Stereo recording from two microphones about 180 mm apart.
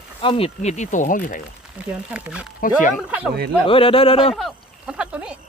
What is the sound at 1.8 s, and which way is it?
Speech, 5° right (ahead or behind).